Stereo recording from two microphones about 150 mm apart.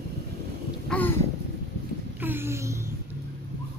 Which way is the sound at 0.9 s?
10° left (ahead or behind).